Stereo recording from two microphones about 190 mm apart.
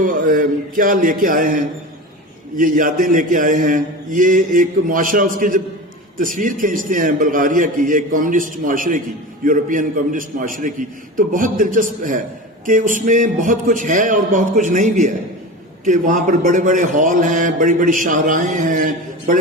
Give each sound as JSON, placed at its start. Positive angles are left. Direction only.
{"t": 0.0, "sound": "a man's voice", "side_deg": -45}